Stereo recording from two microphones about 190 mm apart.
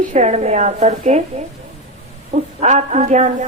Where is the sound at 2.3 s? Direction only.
35° right (ahead or behind).